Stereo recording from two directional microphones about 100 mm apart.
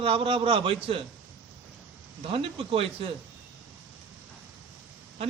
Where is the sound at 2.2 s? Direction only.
70° right (ahead or behind).